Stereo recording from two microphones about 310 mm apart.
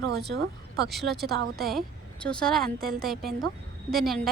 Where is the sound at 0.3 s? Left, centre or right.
Right.